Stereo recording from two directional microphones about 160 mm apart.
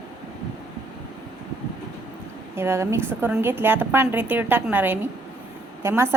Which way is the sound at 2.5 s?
15° right (ahead or behind).